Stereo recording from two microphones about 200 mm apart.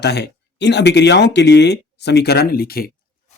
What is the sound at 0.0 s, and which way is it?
Speech, 55° left (ahead or behind).